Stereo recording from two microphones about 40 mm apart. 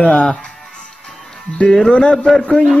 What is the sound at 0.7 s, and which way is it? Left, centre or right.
Music, centre.